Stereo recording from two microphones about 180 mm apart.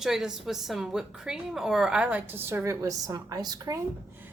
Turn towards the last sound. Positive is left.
turn(degrees=-20)  # may be behind; listen again after turning